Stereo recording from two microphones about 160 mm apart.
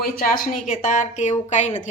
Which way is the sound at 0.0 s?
65° left (ahead or behind).